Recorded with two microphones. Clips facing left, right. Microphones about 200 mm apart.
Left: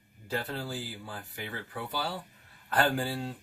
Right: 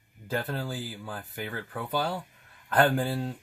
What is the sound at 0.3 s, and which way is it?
Speech, 50° right (ahead or behind).